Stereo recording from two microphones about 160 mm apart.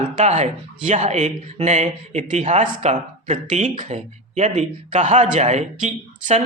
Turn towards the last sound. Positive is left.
turn(degrees=-50)  # may be behind; listen again after turning